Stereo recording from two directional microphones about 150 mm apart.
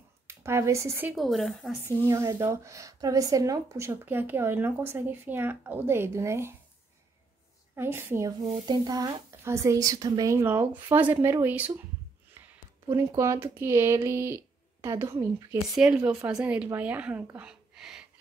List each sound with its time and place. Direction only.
0.3 s speech: 15° right (ahead or behind)
1.1 s speech: centre (ahead or behind)
2.0 s speech: 20° right (ahead or behind)
7.7 s speech: 15° right (ahead or behind)
12.8 s speech: 20° right (ahead or behind)
15.7 s speech: 5° right (ahead or behind)